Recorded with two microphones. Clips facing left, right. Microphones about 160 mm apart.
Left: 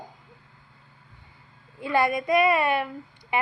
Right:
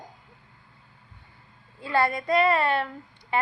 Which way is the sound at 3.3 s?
15° left (ahead or behind).